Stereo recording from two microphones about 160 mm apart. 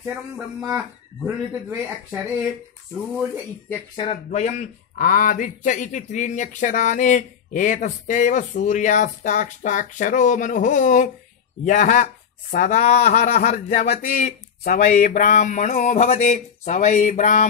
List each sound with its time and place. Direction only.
0.7 s speech: 10° right (ahead or behind)
3.9 s speech: 40° left (ahead or behind)
14.0 s speech: 55° left (ahead or behind)